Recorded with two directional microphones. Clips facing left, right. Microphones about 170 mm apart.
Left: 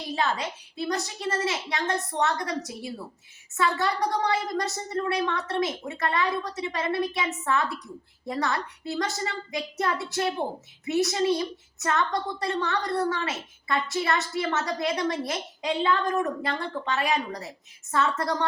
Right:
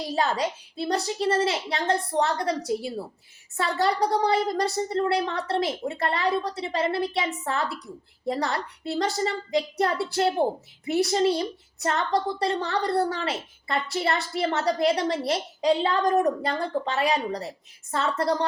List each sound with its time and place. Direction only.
0.2 s a woman's voice: 35° right (ahead or behind)